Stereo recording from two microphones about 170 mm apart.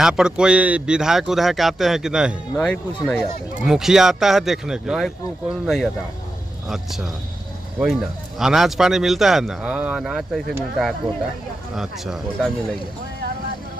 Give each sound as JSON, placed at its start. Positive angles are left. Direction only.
{"t": 0.0, "sound": "speech", "side_deg": -5}